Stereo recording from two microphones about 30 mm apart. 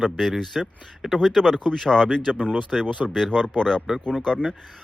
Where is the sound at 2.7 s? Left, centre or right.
Centre.